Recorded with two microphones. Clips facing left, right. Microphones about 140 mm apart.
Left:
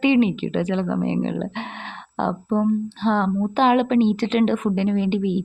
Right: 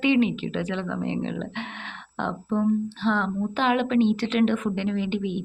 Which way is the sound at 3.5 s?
20° left (ahead or behind).